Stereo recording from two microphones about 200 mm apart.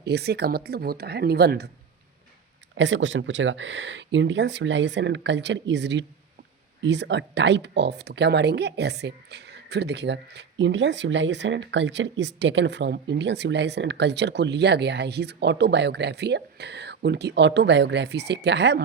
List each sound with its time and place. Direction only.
0.0 s speech: 55° right (ahead or behind)
2.7 s speech: 65° right (ahead or behind)